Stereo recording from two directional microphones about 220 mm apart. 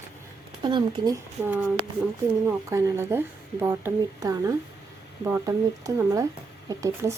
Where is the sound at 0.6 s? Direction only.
20° right (ahead or behind).